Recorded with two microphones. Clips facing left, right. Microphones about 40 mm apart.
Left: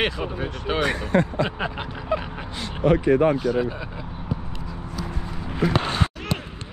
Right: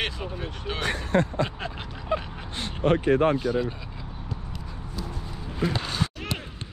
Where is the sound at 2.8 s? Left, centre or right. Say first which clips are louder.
Left 3 dB; right.